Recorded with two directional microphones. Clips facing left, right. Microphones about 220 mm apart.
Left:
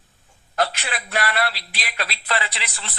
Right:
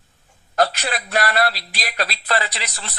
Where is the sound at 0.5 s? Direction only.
40° right (ahead or behind).